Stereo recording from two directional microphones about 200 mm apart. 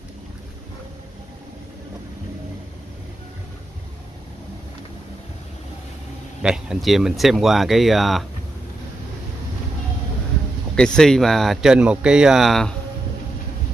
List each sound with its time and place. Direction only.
6.4 s speech: 5° right (ahead or behind)
10.8 s speech: 5° left (ahead or behind)